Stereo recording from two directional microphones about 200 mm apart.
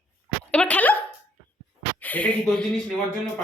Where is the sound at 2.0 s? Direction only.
10° left (ahead or behind).